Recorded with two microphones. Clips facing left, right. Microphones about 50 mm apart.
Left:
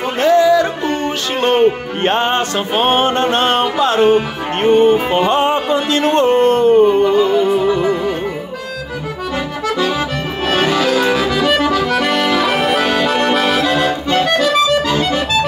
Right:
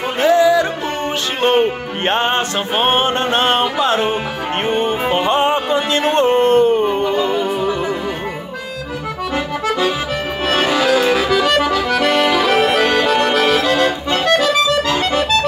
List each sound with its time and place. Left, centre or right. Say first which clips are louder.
0.2 s music: left 1 dB; centre
3.8 s speech: left 5 dB; centre
4.6 s music: left 8 dB; centre
6.9 s music: left 5 dB; centre
10.5 s accordion: even; centre
14.9 s accordion: left 1 dB; centre